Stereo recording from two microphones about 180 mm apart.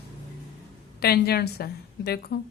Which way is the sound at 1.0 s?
60° left (ahead or behind).